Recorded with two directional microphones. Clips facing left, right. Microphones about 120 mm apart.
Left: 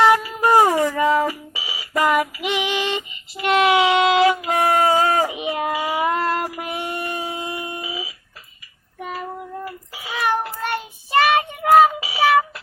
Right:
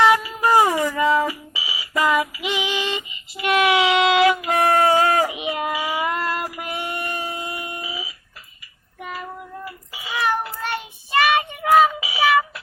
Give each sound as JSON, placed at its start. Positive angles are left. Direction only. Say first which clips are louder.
{"t": 0.0, "sound": "fire alarm", "louder": "left 1 dB", "side_deg": 45}
{"t": 9.0, "sound": "child singing", "louder": "left 3 dB", "side_deg": 40}